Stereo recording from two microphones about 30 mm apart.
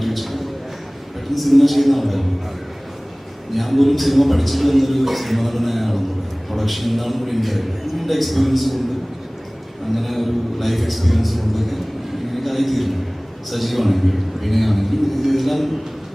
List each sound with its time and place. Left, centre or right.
0.0 s a sound: centre
1.3 s a man's voice: centre
3.5 s a man's voice: centre
9.9 s a man's voice: centre